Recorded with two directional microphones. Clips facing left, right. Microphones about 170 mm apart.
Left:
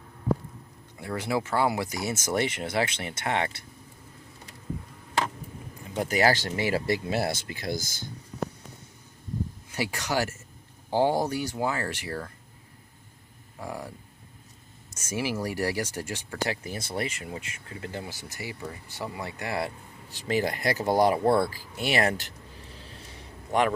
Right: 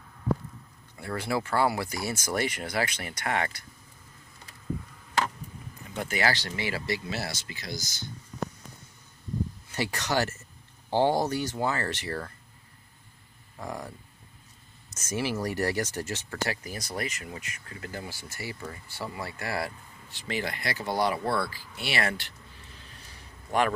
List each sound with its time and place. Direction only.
0.9 s speech: 20° left (ahead or behind)
6.0 s speech: 40° left (ahead or behind)
9.7 s speech: 10° left (ahead or behind)
13.6 s speech: 10° left (ahead or behind)
20.1 s speech: 40° left (ahead or behind)
21.2 s speech: 20° left (ahead or behind)
21.5 s a sound: 45° left (ahead or behind); by 23.7 s 20° left (ahead or behind)